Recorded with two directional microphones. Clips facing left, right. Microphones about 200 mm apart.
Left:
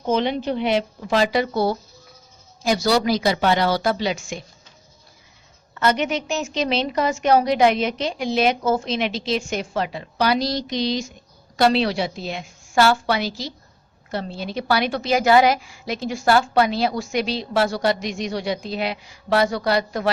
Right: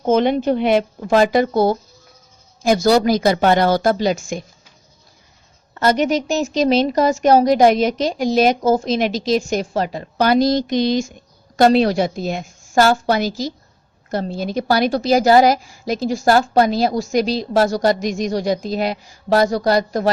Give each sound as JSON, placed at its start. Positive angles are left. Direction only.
{"t": 0.0, "sound": "a woman's voice", "side_deg": -50}
{"t": 5.7, "sound": "a woman's voice", "side_deg": -40}